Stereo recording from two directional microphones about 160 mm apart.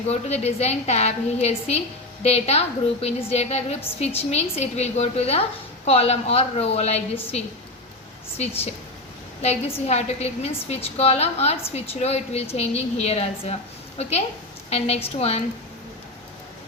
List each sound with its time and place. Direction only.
0.1 s a woman's voice: 40° left (ahead or behind)
9.4 s a woman's voice: 40° left (ahead or behind)
14.7 s a woman's voice: 40° left (ahead or behind)